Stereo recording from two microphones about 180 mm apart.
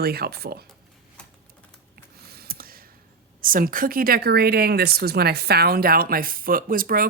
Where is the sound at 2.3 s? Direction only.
55° right (ahead or behind).